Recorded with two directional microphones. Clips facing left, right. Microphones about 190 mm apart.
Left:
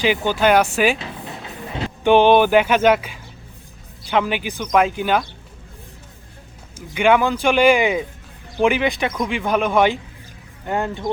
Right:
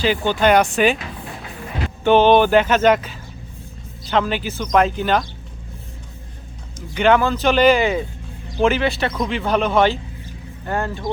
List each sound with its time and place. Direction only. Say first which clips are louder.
0.2 s speech: right 1 dB; 5° left (ahead or behind)
2.0 s speech: even; 15° left (ahead or behind)
6.7 s speech: even; 10° left (ahead or behind)